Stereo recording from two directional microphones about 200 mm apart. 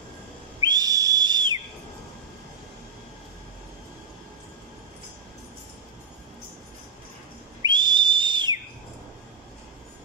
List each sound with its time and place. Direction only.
0.6 s whistle: 20° right (ahead or behind)
7.6 s whistle: 20° right (ahead or behind)